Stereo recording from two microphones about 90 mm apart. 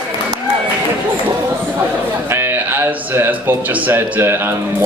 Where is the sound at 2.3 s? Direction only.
25° right (ahead or behind).